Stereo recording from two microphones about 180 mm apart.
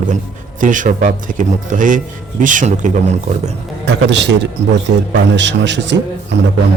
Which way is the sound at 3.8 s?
80° right.